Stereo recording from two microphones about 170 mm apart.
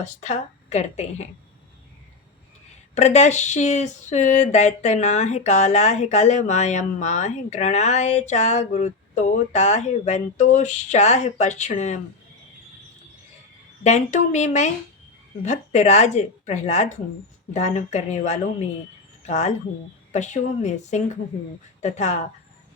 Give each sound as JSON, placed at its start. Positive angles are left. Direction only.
{"t": 0.0, "sound": "speech", "side_deg": 45}
{"t": 2.9, "sound": "speech", "side_deg": 40}
{"t": 13.8, "sound": "speech", "side_deg": 45}